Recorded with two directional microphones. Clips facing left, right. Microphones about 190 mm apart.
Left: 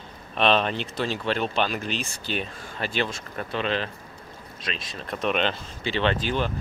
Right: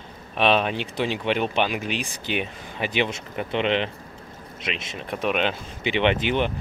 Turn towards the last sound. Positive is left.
turn(degrees=-20)  # may be behind; listen again after turning